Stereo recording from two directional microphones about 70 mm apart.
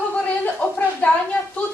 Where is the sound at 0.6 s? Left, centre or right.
Centre.